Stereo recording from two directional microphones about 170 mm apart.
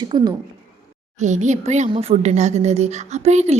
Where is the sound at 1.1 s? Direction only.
45° right (ahead or behind).